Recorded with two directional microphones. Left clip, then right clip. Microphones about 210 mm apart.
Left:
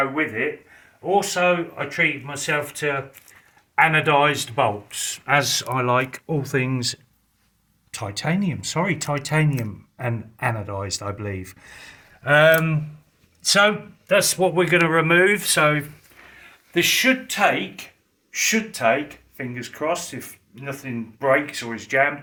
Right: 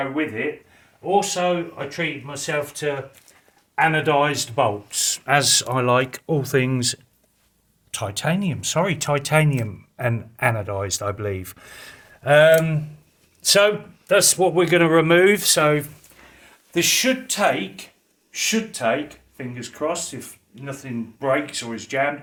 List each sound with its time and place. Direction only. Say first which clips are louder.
1.0 s speech: left 1 dB; 5° right (ahead or behind); by 12.8 s 25° right (ahead or behind)
13.4 s speech: right 1 dB; 40° right (ahead or behind)
18.3 s speech: left 2 dB; 10° right (ahead or behind)